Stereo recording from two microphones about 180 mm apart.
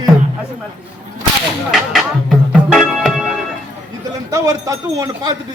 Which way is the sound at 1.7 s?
Centre (ahead or behind).